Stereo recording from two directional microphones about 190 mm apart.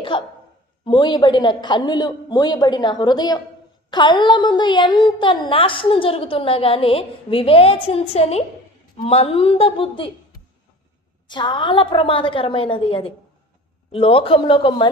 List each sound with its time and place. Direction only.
0.1 s a woman's voice: 25° left (ahead or behind)
11.2 s a woman's voice: 25° left (ahead or behind)